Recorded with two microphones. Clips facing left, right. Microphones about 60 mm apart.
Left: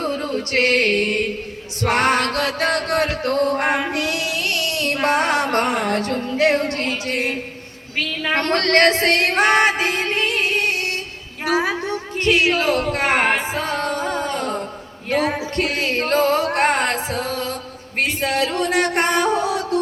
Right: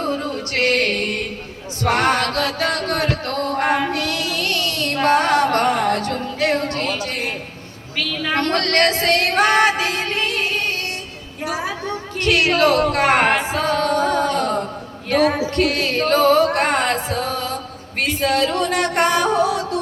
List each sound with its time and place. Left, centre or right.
0.3 s music: left
9.8 s music: centre
11.4 s a sound: left
11.8 s music: centre
13.7 s music: left
15.1 s singing: centre
15.5 s music: left
16.5 s a sound: left
18.9 s music: centre
19.5 s music: right